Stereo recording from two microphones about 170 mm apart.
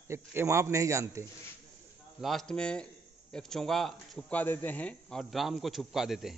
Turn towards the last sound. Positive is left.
turn(degrees=0)  # may be behind; listen again after turning